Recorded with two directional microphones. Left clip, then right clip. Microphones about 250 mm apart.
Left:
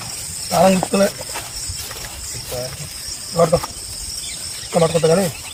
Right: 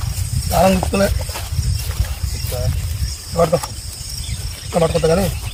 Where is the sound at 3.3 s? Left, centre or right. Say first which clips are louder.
Even; centre.